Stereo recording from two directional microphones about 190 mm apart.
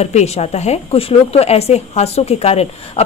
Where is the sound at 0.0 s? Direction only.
35° left (ahead or behind).